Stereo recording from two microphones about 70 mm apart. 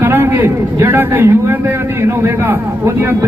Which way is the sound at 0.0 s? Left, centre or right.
Right.